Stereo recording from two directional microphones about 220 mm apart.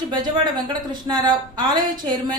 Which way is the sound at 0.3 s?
20° right (ahead or behind).